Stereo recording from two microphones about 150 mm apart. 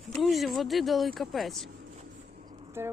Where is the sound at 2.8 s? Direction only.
15° right (ahead or behind).